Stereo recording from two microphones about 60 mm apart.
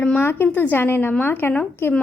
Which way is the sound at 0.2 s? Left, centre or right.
Left.